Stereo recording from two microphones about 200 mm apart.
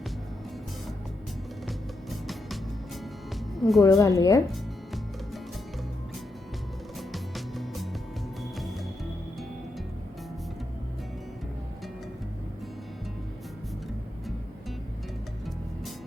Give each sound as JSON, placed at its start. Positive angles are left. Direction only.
{"t": 1.6, "sound": "music", "side_deg": 0}
{"t": 3.5, "sound": "speech", "side_deg": 0}
{"t": 3.8, "sound": "a woman's voice", "side_deg": 15}
{"t": 7.1, "sound": "music", "side_deg": 0}